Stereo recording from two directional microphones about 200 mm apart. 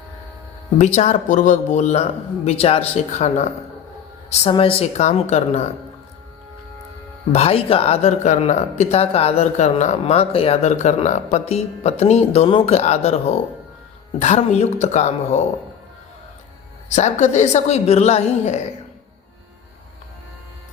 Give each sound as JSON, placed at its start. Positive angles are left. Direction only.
{"t": 0.9, "sound": "speech", "side_deg": 35}
{"t": 7.3, "sound": "speech", "side_deg": 30}
{"t": 16.9, "sound": "speech", "side_deg": 35}